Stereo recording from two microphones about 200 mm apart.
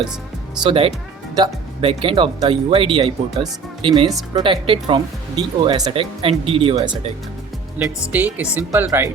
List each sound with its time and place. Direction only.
0.6 s speech: 25° right (ahead or behind)
7.8 s speech: 10° right (ahead or behind)